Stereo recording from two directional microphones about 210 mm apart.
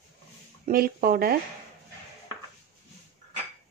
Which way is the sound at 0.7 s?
45° right (ahead or behind).